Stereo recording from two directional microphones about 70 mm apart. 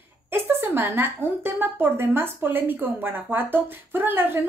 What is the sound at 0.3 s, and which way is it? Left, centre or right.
A woman's voice, right.